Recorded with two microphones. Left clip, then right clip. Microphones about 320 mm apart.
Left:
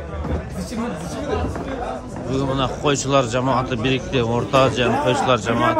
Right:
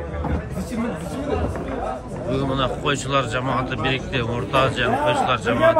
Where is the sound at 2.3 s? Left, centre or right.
Centre.